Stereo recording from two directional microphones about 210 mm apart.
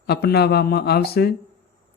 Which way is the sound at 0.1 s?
50° left (ahead or behind).